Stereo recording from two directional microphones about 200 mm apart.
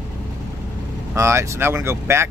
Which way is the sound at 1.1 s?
15° right (ahead or behind).